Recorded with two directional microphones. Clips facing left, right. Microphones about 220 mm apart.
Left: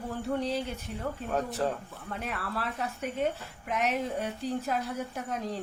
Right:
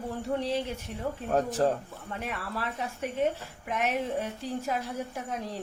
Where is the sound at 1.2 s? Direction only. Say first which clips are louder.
Right 5 dB; 40° right (ahead or behind).